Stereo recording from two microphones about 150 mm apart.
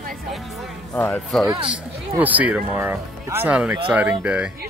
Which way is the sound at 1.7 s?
10° right (ahead or behind).